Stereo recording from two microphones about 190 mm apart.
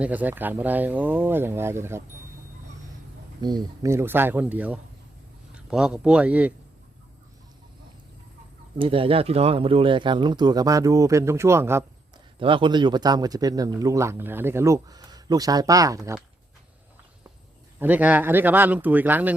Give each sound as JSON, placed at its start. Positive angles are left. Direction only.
{"t": 0.0, "sound": "speech", "side_deg": -10}
{"t": 3.4, "sound": "speech", "side_deg": -20}
{"t": 8.8, "sound": "a man's voice", "side_deg": -30}
{"t": 12.4, "sound": "a man's voice", "side_deg": -25}
{"t": 17.7, "sound": "speech", "side_deg": -10}